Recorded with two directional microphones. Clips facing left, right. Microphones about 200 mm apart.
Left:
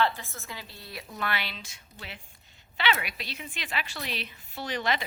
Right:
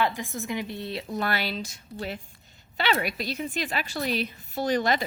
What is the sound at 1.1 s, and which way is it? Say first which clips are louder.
A woman's voice: right 5 dB; 40° right (ahead or behind).